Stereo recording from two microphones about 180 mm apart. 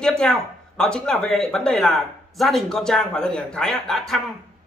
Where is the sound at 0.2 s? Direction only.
5° left (ahead or behind).